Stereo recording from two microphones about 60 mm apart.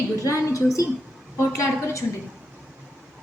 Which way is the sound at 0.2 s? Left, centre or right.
Left.